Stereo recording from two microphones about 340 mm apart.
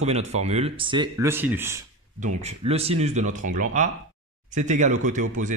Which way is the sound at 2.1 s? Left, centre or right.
Right.